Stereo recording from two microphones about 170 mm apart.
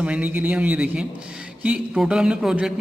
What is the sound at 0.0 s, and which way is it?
A man's voice, 10° right (ahead or behind).